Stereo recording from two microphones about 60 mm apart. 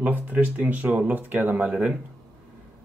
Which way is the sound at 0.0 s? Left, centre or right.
Right.